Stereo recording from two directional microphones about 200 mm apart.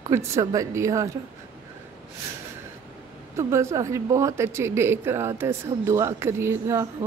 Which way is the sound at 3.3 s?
15° right (ahead or behind).